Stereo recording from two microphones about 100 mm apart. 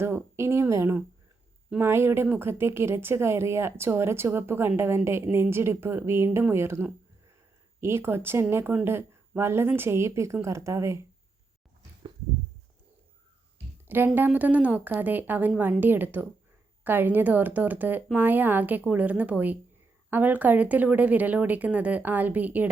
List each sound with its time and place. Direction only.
0.0 s speech: 25° right (ahead or behind)
13.8 s a woman's voice: 20° right (ahead or behind)